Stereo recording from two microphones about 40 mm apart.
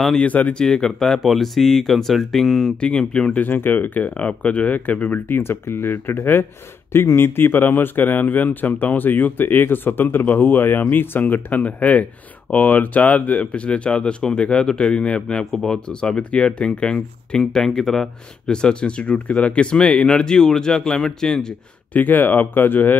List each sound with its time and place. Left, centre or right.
0.2 s speech: left
0.6 s speech: centre
1.2 s speech: centre
2.8 s speech: left
3.3 s speech: left
4.2 s speech: left
5.3 s speech: left
6.9 s speech: left
15.5 s speech: centre
15.9 s speech: left
20.3 s speech: centre
21.9 s speech: left